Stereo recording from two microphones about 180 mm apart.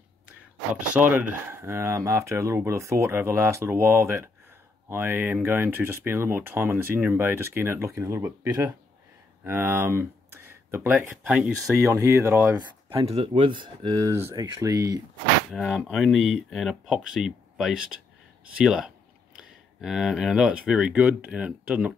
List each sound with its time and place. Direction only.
0.9 s speech: 10° right (ahead or behind)
12.9 s speech: 30° right (ahead or behind)
15.5 s speech: centre (ahead or behind)